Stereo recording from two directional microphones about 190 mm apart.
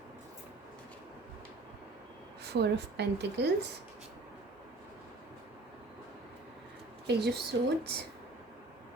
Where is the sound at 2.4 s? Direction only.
60° right (ahead or behind).